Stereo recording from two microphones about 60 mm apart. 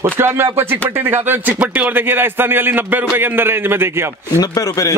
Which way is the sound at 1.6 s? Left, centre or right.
Right.